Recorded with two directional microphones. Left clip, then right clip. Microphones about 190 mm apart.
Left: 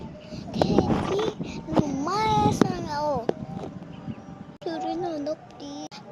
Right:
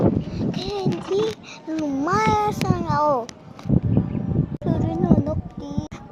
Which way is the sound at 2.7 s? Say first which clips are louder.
Right 7 dB; 15° right (ahead or behind).